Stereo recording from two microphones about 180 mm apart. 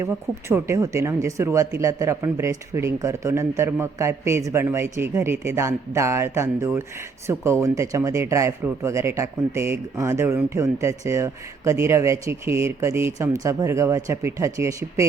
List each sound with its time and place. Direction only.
0.0 s speech: 15° right (ahead or behind)